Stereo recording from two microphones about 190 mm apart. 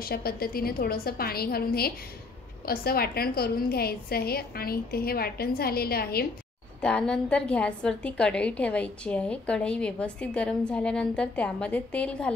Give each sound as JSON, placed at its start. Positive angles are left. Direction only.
{"t": 0.0, "sound": "a woman's voice", "side_deg": 55}
{"t": 6.8, "sound": "a woman's voice", "side_deg": 5}